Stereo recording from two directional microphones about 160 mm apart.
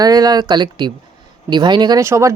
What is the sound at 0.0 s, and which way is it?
Speech, 25° right (ahead or behind).